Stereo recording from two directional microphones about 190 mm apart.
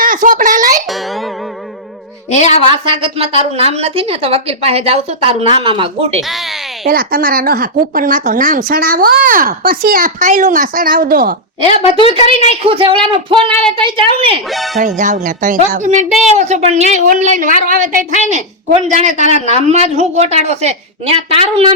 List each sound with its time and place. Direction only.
0.0 s a sound: 45° right (ahead or behind)
0.9 s music: centre (ahead or behind)
2.3 s a woman's voice: 35° left (ahead or behind)
2.6 s a woman's voice: 30° right (ahead or behind)
6.2 s speech: centre (ahead or behind)
6.8 s speech: 50° right (ahead or behind)
11.6 s a woman's voice: 30° left (ahead or behind)
12.6 s a woman's voice: 30° right (ahead or behind)
14.5 s speech: centre (ahead or behind)
14.8 s a woman's voice: 40° right (ahead or behind)